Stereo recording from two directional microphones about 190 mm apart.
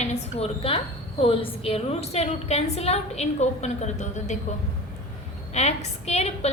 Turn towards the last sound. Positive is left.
turn(degrees=35)  # may be behind; listen again after turning